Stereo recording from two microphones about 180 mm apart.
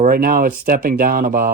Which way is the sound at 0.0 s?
50° right (ahead or behind).